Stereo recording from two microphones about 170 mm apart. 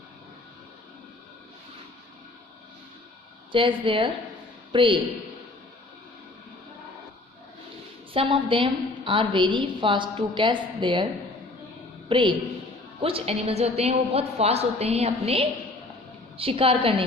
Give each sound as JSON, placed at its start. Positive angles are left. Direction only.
{"t": 3.5, "sound": "a woman's voice", "side_deg": -30}
{"t": 8.1, "sound": "a woman's voice", "side_deg": -30}
{"t": 12.0, "sound": "a woman's voice", "side_deg": -30}